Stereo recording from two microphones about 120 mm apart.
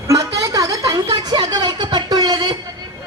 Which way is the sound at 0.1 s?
30° right (ahead or behind).